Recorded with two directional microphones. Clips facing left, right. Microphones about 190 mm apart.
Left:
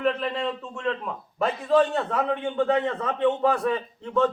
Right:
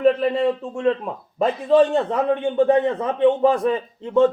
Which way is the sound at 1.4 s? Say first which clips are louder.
Right 5 dB; 20° right (ahead or behind).